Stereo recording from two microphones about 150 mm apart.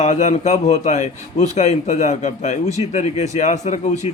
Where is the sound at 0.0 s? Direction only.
50° left (ahead or behind).